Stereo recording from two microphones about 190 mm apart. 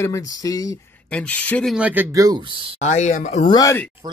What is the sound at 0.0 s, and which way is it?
Speech, 15° left (ahead or behind).